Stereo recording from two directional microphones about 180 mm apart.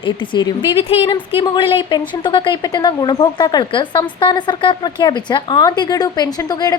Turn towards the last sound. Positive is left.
turn(degrees=20)  # may be behind; listen again after turning